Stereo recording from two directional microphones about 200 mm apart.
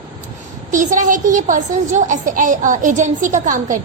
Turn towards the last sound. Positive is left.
turn(degrees=-40)  # may be behind; listen again after turning